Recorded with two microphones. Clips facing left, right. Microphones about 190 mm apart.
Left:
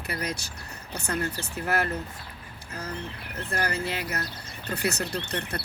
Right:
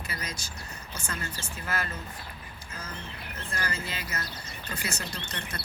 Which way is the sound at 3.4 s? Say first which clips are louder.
Left 6 dB; 65° left (ahead or behind).